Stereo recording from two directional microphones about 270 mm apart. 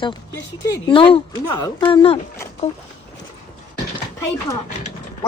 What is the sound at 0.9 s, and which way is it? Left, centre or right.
Speech, centre.